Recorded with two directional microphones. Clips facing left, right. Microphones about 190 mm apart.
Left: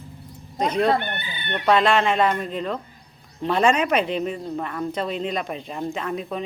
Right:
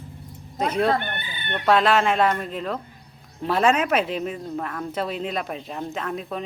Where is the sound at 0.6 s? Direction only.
5° right (ahead or behind).